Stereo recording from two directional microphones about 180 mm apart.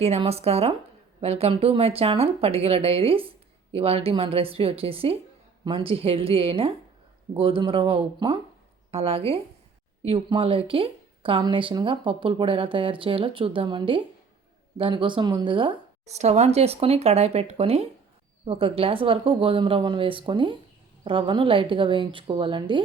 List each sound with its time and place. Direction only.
0.0 s speech: 35° right (ahead or behind)